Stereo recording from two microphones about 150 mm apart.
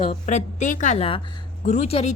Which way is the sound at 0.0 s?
45° left (ahead or behind).